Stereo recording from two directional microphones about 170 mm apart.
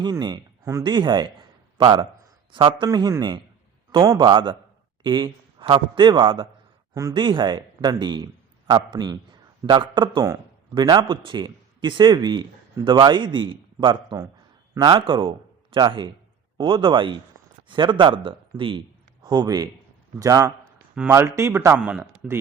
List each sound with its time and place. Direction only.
0.0 s a man's voice: 25° right (ahead or behind)
21.8 s speech: 5° right (ahead or behind)